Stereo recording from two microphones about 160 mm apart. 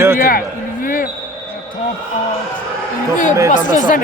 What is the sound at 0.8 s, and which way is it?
Basketball bounce, 65° left (ahead or behind).